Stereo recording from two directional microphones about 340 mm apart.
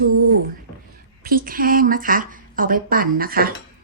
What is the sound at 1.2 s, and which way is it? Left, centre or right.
A woman's voice, right.